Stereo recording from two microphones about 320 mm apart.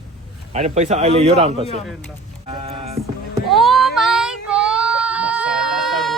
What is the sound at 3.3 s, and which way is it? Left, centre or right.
Child singing, centre.